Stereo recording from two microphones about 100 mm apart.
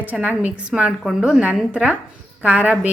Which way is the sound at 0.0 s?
15° right (ahead or behind).